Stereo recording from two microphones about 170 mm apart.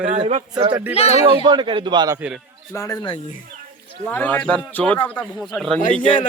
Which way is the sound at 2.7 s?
20° left (ahead or behind).